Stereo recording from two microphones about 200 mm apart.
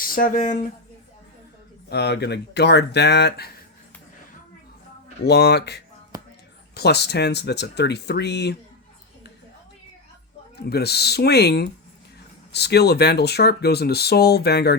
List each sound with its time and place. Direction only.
0.0 s speech: 45° left (ahead or behind)
1.9 s speech: 55° left (ahead or behind)
5.2 s speech: 55° left (ahead or behind)
6.1 s a sound: 15° right (ahead or behind)
6.7 s speech: 55° left (ahead or behind)
10.7 s speech: 55° left (ahead or behind)